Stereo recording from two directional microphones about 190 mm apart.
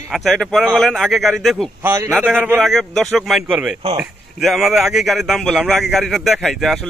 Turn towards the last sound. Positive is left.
turn(degrees=0)  # may be behind; listen again after turning